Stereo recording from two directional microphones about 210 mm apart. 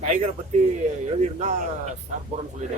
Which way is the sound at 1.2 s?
35° right (ahead or behind).